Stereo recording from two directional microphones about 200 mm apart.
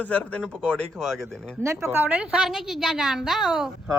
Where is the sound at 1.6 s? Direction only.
15° right (ahead or behind).